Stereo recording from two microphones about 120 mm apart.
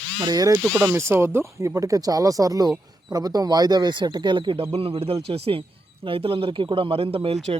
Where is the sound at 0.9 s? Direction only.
20° right (ahead or behind).